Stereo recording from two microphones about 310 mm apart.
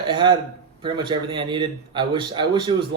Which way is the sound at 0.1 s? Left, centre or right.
Centre.